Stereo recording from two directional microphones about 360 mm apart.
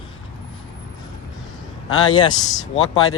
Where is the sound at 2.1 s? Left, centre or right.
Centre.